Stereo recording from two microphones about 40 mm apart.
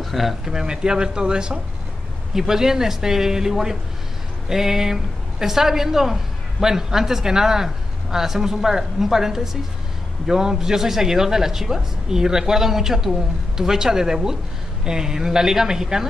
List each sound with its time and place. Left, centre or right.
0.0 s speech: centre
0.5 s speech: centre